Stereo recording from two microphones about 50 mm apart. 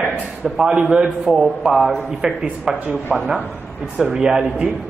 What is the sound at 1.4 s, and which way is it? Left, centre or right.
Speech, centre.